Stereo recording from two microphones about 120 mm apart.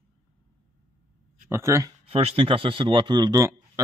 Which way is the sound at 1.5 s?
20° right (ahead or behind).